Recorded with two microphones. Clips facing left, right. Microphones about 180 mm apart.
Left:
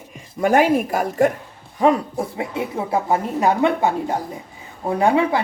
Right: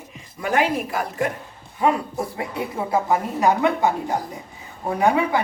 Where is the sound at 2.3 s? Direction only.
25° left (ahead or behind).